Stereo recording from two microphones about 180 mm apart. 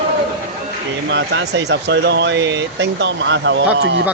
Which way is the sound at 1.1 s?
75° right (ahead or behind).